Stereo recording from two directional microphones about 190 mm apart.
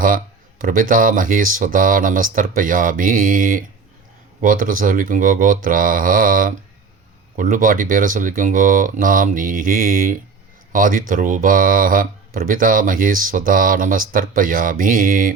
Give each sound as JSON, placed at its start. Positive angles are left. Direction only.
{"t": 0.6, "sound": "speech", "side_deg": -45}